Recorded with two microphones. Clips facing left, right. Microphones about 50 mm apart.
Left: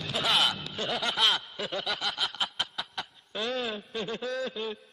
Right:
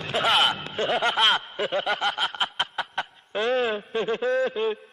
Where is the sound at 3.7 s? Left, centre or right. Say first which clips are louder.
Right 8 dB; right.